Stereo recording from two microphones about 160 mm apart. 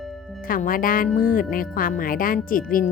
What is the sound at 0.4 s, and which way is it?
Speech, 60° left (ahead or behind).